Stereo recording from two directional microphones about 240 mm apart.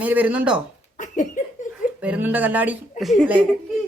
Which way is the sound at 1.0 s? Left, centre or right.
Left.